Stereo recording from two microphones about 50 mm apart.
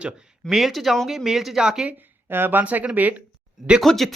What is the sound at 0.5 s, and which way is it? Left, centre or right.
Speech, centre.